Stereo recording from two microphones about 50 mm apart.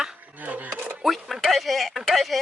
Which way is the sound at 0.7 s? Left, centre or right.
Right.